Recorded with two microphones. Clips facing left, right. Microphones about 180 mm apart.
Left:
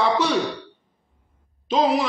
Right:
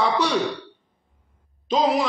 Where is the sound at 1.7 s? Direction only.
Centre (ahead or behind).